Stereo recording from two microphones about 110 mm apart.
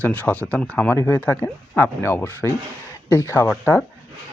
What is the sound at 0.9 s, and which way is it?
Speech, 20° left (ahead or behind).